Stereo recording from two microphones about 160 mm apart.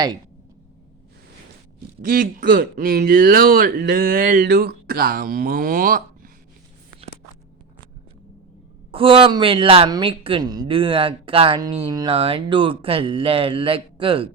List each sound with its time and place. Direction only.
2.0 s a man's voice: 60° right (ahead or behind)
8.9 s a man's voice: 35° right (ahead or behind)
11.9 s speech: 25° right (ahead or behind)
12.1 s a man's voice: 35° right (ahead or behind)